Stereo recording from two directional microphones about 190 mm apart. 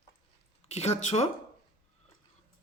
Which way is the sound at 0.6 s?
35° left (ahead or behind).